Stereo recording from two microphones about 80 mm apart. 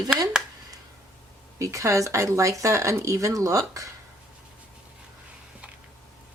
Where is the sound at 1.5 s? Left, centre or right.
Right.